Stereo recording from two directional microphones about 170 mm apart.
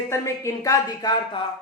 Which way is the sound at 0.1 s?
20° left (ahead or behind).